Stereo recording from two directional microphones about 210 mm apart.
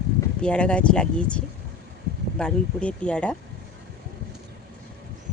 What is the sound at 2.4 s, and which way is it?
Speech, 5° left (ahead or behind).